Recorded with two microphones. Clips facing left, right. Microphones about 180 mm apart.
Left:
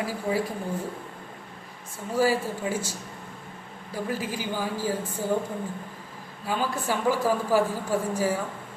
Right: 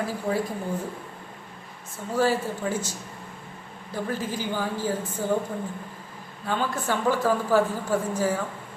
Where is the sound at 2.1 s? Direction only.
10° left (ahead or behind).